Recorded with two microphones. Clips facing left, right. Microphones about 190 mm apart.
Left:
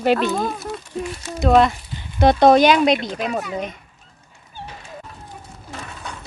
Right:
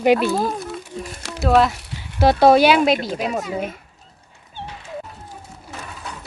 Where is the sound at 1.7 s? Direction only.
80° right.